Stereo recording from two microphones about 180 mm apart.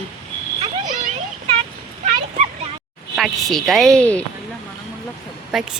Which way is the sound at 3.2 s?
Centre (ahead or behind).